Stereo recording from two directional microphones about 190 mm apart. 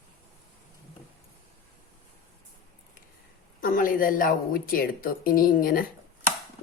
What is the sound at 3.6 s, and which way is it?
A woman's voice, 45° left (ahead or behind).